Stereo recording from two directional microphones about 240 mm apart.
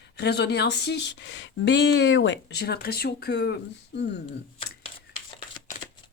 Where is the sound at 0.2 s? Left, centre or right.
Left.